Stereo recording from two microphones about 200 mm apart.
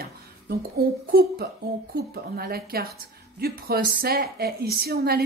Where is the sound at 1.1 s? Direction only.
50° right (ahead or behind).